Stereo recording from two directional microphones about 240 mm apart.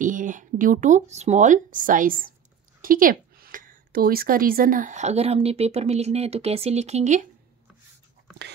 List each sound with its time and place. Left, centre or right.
0.0 s a woman's voice: right